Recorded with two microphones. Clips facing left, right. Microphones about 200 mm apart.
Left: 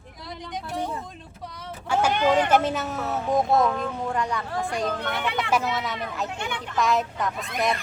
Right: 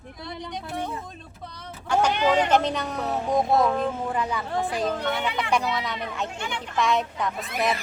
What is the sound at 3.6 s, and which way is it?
Speech, 30° right (ahead or behind).